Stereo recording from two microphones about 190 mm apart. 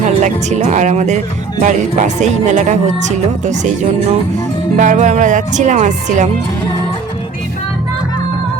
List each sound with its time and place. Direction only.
0.0 s speech: 40° right (ahead or behind)
4.8 s speech: 40° right (ahead or behind)